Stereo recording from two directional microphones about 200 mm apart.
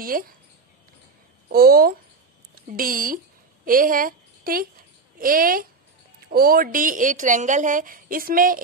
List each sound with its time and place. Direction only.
0.0 s speech: 45° right (ahead or behind)
1.5 s a woman's voice: 50° right (ahead or behind)